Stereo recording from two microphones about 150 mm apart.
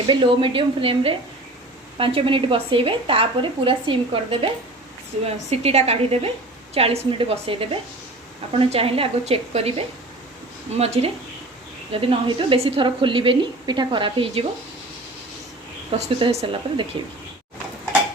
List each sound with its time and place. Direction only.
0.1 s a woman's voice: 35° right (ahead or behind)
15.9 s a woman's voice: 45° right (ahead or behind)